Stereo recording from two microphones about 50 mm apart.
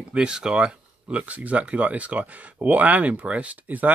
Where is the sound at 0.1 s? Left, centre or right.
Centre.